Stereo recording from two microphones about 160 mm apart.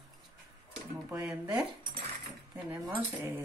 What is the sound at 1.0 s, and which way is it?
Speech, 5° right (ahead or behind).